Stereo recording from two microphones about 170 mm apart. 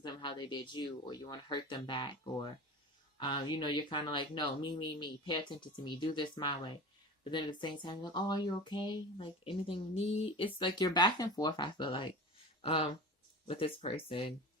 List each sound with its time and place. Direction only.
0.0 s speech: 25° left (ahead or behind)